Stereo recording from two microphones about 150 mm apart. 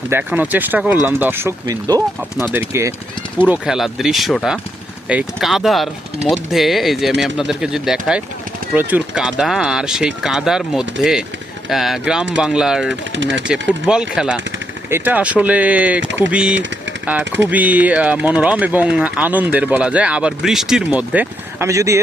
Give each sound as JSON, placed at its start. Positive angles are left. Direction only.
{"t": 0.1, "sound": "speech", "side_deg": -10}